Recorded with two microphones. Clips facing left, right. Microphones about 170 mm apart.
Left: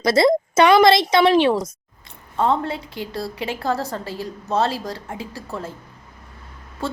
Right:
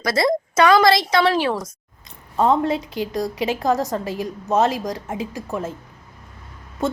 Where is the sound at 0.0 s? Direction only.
25° left (ahead or behind).